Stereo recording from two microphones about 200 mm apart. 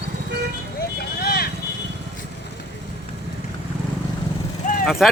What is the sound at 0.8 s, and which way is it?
Vehicle, 50° left (ahead or behind).